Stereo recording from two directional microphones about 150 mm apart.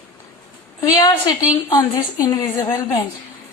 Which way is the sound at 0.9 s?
25° left (ahead or behind).